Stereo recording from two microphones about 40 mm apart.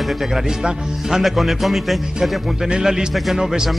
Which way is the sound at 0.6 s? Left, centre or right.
Centre.